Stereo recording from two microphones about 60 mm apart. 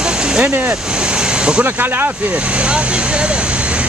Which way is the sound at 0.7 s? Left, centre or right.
Centre.